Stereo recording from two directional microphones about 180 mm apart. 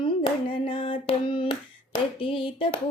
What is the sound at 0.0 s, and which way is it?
Hands, 30° left (ahead or behind).